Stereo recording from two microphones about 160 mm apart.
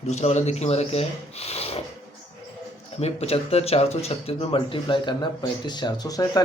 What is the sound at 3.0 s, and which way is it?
Speech, 40° left (ahead or behind).